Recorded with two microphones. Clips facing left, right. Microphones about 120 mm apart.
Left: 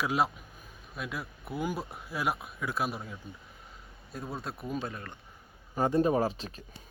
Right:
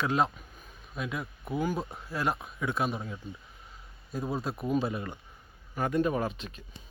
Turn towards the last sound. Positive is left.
turn(degrees=35)  # may be behind; listen again after turning